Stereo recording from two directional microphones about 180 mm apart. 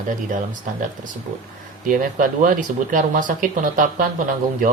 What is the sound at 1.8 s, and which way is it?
Speech, 50° right (ahead or behind).